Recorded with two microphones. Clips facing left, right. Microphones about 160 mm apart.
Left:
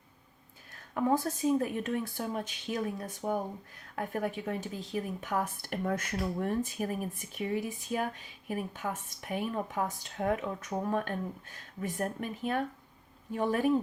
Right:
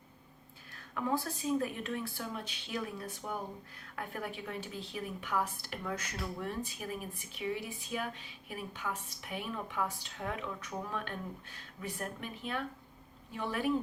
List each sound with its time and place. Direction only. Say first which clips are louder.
0.9 s a woman's voice: left 6 dB; 45° left (ahead or behind)